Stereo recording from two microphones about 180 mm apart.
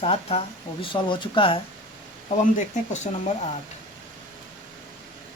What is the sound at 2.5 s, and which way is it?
Speech, 40° left (ahead or behind).